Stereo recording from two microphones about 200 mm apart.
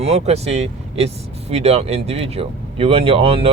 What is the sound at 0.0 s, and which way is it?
Speech, 30° right (ahead or behind).